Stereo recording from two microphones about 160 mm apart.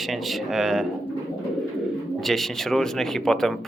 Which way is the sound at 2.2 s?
Centre (ahead or behind).